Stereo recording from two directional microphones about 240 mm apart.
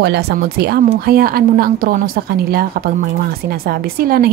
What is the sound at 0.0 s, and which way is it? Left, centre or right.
Speech, right.